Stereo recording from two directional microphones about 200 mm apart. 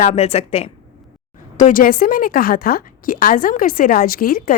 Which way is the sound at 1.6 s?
40° left (ahead or behind).